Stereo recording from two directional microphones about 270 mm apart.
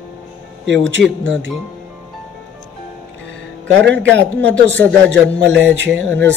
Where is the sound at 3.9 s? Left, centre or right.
Right.